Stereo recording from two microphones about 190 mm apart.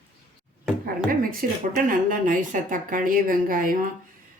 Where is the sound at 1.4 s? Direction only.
50° right (ahead or behind).